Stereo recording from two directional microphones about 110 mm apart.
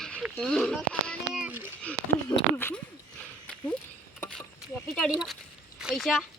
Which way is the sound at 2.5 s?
20° left (ahead or behind).